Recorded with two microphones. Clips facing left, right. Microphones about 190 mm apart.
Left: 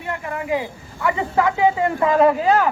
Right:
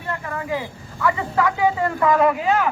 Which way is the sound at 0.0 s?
20° left (ahead or behind).